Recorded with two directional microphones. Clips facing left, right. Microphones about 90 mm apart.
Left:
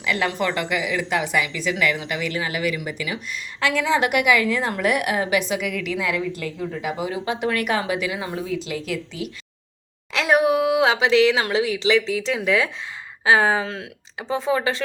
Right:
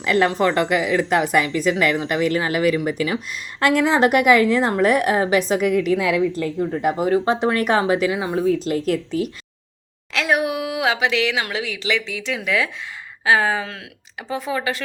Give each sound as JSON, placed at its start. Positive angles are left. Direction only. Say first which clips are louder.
{"t": 0.0, "sound": "a woman's voice", "louder": "right 5 dB", "side_deg": -45}
{"t": 6.8, "sound": "a woman's voice", "louder": "right 8 dB", "side_deg": -45}
{"t": 8.2, "sound": "speech", "louder": "right 6 dB", "side_deg": -25}
{"t": 8.6, "sound": "speech", "louder": "right 7 dB", "side_deg": -45}
{"t": 10.1, "sound": "speech", "louder": "left 2 dB", "side_deg": 20}